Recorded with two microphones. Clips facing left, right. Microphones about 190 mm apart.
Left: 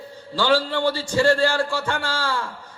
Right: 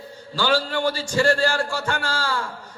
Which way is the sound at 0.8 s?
30° left (ahead or behind).